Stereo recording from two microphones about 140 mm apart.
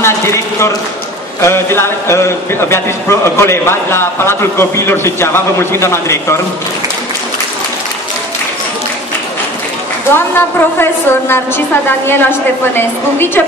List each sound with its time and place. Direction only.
0.0 s a sound: 20° left (ahead or behind)
1.4 s a man's voice: 15° left (ahead or behind)
10.1 s a woman's voice: 15° left (ahead or behind)